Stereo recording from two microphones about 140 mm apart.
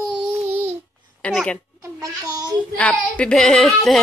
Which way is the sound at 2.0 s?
25° right (ahead or behind).